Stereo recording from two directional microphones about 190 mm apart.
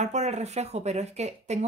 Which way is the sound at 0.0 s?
35° right (ahead or behind).